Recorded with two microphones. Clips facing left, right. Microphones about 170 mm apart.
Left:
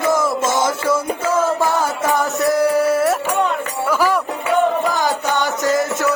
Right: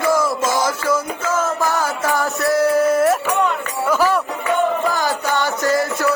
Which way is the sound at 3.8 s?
10° left (ahead or behind).